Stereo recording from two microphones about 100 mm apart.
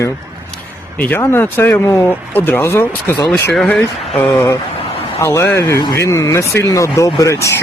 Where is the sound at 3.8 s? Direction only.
20° left (ahead or behind).